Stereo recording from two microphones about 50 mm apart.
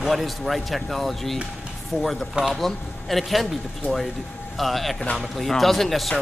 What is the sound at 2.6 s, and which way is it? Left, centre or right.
Speech, centre.